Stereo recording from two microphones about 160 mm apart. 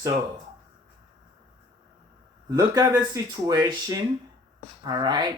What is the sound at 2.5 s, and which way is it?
Speech, 20° right (ahead or behind).